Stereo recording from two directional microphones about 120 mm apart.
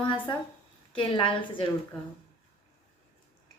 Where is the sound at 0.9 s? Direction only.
45° left (ahead or behind).